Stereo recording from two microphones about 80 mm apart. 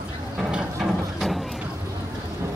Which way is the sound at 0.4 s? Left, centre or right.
Centre.